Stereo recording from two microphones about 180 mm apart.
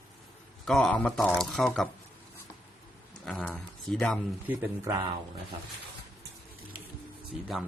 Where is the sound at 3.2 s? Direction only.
Centre (ahead or behind).